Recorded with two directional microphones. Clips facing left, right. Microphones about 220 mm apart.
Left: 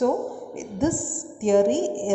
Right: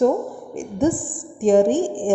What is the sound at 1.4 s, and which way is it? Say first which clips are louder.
Speech: right 3 dB; 35° right (ahead or behind).